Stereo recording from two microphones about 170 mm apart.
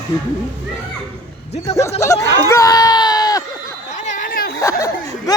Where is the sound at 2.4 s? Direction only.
15° left (ahead or behind).